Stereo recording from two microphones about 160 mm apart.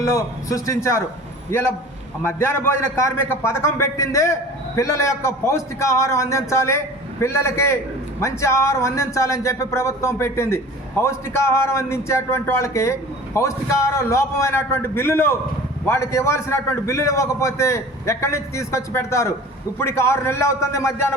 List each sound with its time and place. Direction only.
0.0 s a man's voice: 20° left (ahead or behind)